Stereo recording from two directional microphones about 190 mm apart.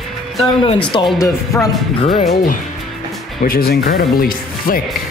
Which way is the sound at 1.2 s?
15° left (ahead or behind).